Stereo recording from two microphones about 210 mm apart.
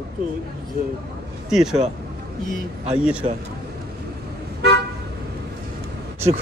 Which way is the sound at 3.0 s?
5° right (ahead or behind).